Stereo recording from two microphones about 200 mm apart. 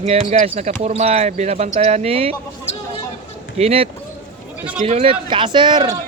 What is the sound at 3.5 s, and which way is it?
Speech, 30° right (ahead or behind).